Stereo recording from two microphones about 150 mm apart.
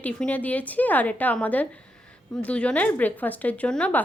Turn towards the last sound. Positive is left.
turn(degrees=10)  # may be behind; listen again after turning